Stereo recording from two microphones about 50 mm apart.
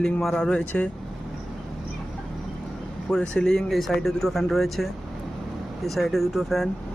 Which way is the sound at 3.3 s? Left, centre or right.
Centre.